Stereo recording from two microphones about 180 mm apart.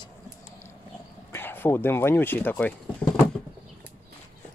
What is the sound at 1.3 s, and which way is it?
Speech, 10° left (ahead or behind).